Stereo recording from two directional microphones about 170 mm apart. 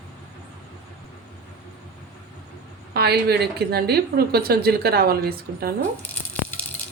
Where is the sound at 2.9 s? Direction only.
70° right (ahead or behind).